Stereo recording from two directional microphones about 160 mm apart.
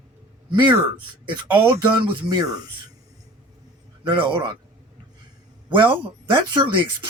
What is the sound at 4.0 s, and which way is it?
Speech, 30° right (ahead or behind).